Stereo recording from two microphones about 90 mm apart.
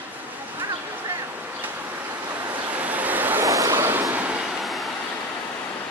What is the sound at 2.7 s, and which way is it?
Vehicle, 15° right (ahead or behind).